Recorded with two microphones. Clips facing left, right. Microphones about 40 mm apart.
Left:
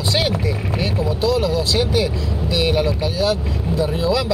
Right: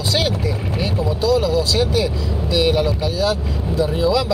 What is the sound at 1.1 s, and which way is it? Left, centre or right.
Speech, left.